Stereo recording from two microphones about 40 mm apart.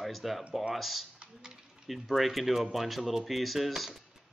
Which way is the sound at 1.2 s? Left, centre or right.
Centre.